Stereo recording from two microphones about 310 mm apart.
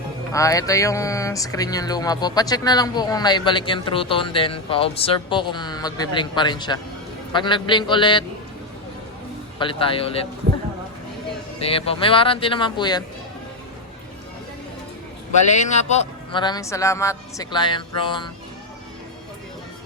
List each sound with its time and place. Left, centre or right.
0.3 s speech: centre
9.6 s speech: centre
11.6 s speech: centre
15.5 s speech: left